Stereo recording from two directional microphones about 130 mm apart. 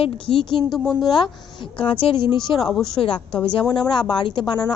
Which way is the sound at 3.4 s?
45° left (ahead or behind).